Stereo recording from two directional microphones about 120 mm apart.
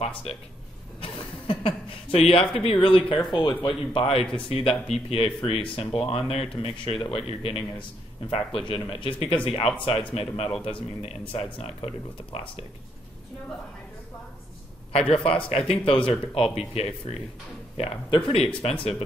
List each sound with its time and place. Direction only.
0.3 s speech: 55° left (ahead or behind)
1.0 s a sound: 45° left (ahead or behind)
3.3 s speech: 40° left (ahead or behind); by 12.6 s 55° left (ahead or behind)
14.9 s a man's voice: 55° left (ahead or behind)